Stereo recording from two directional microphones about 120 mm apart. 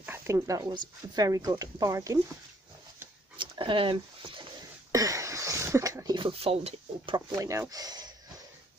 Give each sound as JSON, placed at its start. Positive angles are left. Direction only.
{"t": 0.0, "sound": "a sound", "side_deg": -20}
{"t": 0.5, "sound": "speech", "side_deg": -30}
{"t": 3.3, "sound": "speech", "side_deg": -45}
{"t": 4.9, "sound": "a sound", "side_deg": -25}
{"t": 6.1, "sound": "speech", "side_deg": -50}
{"t": 7.2, "sound": "speech", "side_deg": -30}